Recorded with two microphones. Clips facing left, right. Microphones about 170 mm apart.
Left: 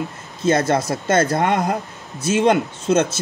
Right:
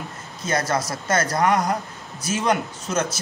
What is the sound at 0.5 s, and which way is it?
Speech, 25° left (ahead or behind).